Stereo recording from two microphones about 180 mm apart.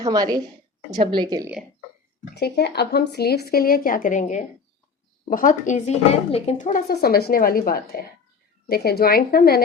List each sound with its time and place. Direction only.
0.0 s speech: 20° right (ahead or behind)
2.3 s speech: 65° left (ahead or behind); by 6.8 s 45° left (ahead or behind)
6.8 s speech: 60° left (ahead or behind)